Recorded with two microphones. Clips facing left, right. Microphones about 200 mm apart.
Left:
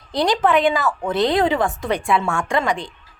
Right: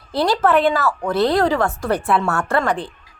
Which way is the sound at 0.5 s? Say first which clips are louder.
Right 1 dB; 15° left (ahead or behind).